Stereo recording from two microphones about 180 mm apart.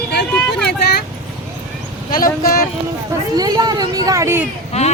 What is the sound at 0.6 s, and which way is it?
Vehicle, 65° left (ahead or behind).